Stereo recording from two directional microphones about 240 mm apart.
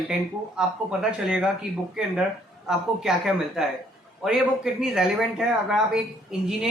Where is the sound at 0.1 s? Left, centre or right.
Centre.